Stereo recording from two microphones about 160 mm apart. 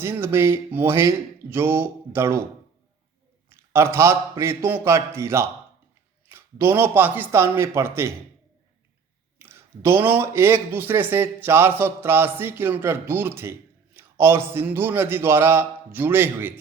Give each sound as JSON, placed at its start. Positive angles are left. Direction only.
{"t": 0.0, "sound": "speech", "side_deg": -15}
{"t": 3.5, "sound": "speech", "side_deg": -15}
{"t": 9.4, "sound": "speech", "side_deg": -15}